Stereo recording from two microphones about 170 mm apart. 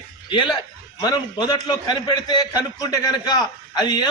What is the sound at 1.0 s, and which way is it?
A man's voice, 25° left (ahead or behind).